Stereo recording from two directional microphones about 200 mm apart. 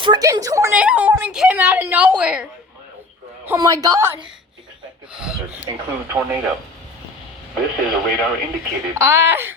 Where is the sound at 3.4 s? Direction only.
20° right (ahead or behind).